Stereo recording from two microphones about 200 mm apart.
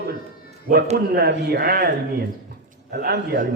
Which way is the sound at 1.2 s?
55° right (ahead or behind).